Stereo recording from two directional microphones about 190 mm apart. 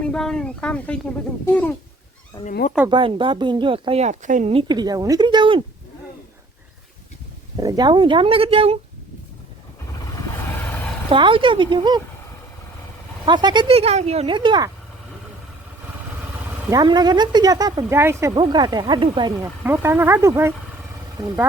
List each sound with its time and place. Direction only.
0.0 s speech: 5° left (ahead or behind)
2.4 s speech: 45° left (ahead or behind)
2.9 s speech: 25° right (ahead or behind)
4.5 s speech: 20° right (ahead or behind)
7.6 s speech: 20° right (ahead or behind)
11.1 s speech: 25° right (ahead or behind)
13.2 s speech: 25° right (ahead or behind)
16.6 s speech: 20° right (ahead or behind)
19.6 s speech: 10° right (ahead or behind)